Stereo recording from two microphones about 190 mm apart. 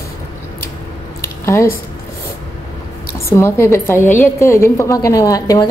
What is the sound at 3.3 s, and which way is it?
A woman's voice, 15° left (ahead or behind).